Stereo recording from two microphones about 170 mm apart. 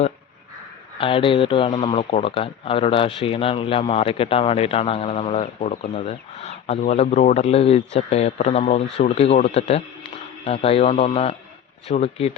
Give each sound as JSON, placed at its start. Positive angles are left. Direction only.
{"t": 0.9, "sound": "speech", "side_deg": 30}